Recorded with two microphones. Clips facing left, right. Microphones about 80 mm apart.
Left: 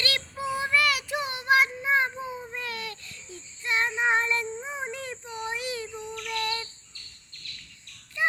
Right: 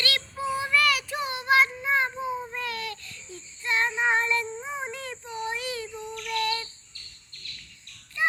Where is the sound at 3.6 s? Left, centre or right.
Centre.